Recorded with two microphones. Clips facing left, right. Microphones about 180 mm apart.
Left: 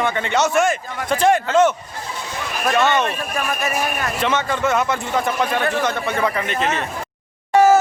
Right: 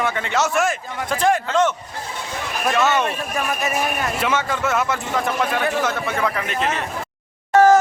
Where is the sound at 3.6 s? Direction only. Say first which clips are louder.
Even; 20° right (ahead or behind).